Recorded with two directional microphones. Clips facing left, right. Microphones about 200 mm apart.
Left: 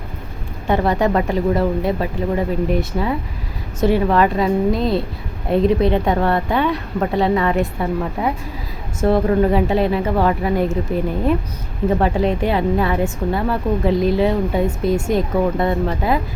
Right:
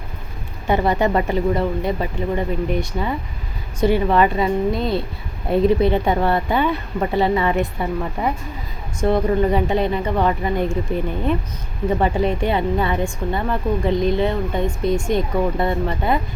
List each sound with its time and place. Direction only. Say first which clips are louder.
0.7 s a woman's voice: left 1 dB; centre (ahead or behind)
11.9 s a woman's voice: even; centre (ahead or behind)